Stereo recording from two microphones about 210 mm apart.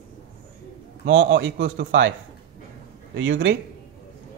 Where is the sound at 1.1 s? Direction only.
60° right (ahead or behind).